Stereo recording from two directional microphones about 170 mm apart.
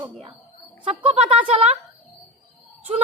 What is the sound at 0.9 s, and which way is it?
Speech, 35° right (ahead or behind).